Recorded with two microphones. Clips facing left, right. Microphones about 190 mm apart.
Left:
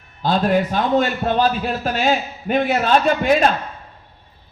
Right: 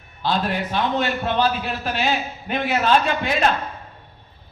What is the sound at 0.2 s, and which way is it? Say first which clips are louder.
A man's voice: left 6 dB; 45° left (ahead or behind).